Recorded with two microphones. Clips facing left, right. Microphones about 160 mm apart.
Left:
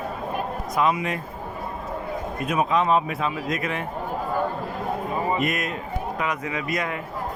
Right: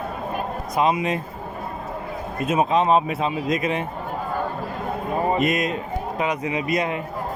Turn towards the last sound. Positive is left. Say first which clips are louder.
# right 4 dB
turn(degrees=-20)  # may be behind; listen again after turning